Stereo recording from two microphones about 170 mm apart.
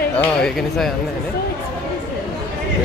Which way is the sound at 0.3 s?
5° left (ahead or behind).